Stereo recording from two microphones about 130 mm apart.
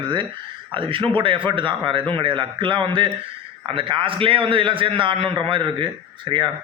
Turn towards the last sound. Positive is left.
turn(degrees=-40)  # may be behind; listen again after turning